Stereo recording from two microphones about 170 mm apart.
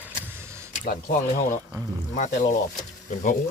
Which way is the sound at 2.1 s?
45° left (ahead or behind).